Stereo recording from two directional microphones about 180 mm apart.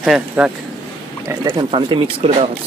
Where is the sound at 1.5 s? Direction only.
30° right (ahead or behind).